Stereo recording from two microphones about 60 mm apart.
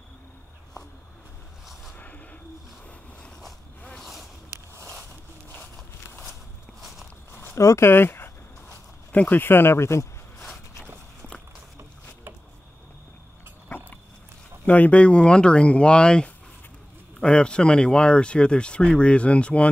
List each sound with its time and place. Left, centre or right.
2.0 s owl: left
4.0 s boat: centre
7.5 s speech: left
7.9 s speech: left
8.6 s a sound: left
9.4 s speech: left
14.7 s speech: left